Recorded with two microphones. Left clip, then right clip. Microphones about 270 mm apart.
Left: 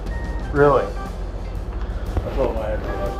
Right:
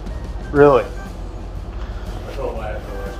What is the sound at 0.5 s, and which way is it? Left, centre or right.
Speech, right.